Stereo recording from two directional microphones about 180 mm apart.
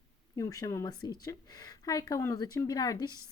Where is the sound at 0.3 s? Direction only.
20° left (ahead or behind).